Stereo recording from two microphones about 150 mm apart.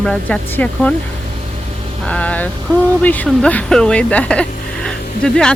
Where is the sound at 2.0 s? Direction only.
10° left (ahead or behind).